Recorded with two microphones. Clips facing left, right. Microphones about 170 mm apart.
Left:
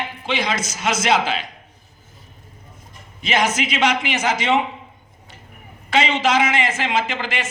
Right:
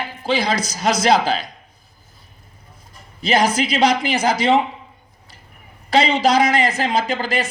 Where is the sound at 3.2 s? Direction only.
35° right (ahead or behind).